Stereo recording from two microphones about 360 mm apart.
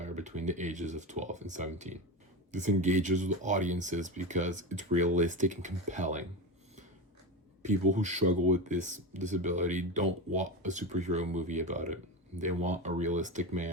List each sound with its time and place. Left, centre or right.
0.0 s speech: centre
7.6 s speech: centre